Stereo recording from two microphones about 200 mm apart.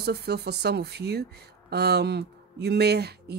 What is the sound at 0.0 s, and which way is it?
Speech, 55° right (ahead or behind).